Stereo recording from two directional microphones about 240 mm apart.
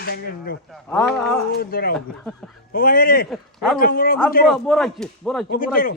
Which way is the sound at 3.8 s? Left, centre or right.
Left.